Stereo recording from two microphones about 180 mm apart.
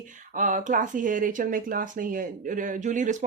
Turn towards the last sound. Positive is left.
turn(degrees=-45)  # may be behind; listen again after turning